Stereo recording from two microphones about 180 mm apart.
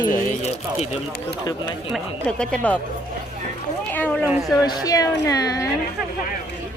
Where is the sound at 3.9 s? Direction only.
10° left (ahead or behind).